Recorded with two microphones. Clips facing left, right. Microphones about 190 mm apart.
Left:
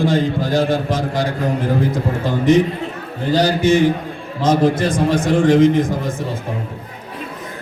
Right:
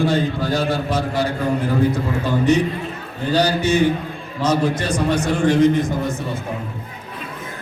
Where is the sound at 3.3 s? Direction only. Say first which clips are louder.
Left 3 dB; 90° left.